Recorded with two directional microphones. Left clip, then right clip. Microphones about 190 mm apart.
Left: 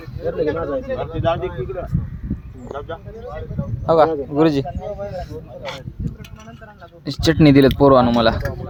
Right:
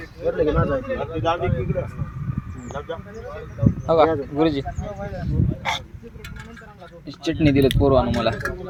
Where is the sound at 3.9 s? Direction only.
35° left (ahead or behind).